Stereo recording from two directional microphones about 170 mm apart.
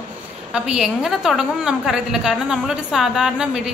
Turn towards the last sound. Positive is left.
turn(degrees=-5)  # may be behind; listen again after turning